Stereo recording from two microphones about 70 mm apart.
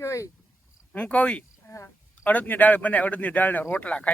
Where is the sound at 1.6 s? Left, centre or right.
Left.